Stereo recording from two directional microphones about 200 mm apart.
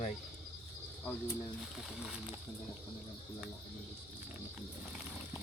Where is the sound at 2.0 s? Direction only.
5° right (ahead or behind).